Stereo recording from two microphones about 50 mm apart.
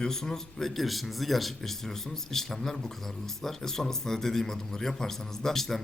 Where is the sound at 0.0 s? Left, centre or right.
Centre.